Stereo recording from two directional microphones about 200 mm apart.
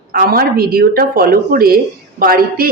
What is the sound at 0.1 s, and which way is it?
Speech, 45° right (ahead or behind).